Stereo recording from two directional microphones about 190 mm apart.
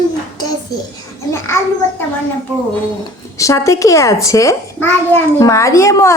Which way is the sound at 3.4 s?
15° left (ahead or behind).